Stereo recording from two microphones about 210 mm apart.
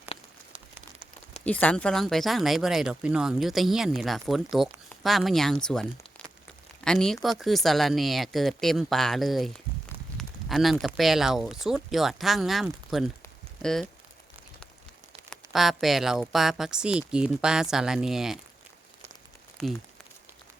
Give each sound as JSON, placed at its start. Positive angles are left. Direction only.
{"t": 1.5, "sound": "speech", "side_deg": 5}
{"t": 15.3, "sound": "speech", "side_deg": 0}
{"t": 19.6, "sound": "speech", "side_deg": 0}